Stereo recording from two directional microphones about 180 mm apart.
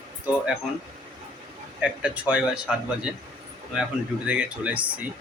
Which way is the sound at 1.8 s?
5° right (ahead or behind).